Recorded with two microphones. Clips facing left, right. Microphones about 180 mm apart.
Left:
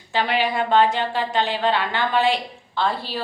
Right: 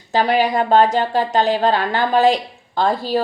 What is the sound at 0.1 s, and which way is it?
Speech, 40° right (ahead or behind).